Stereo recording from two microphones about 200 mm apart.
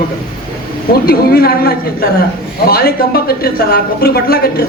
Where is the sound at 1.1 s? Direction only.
50° left (ahead or behind).